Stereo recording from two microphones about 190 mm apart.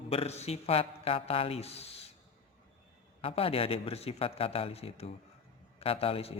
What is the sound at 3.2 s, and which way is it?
Speech, 30° left (ahead or behind).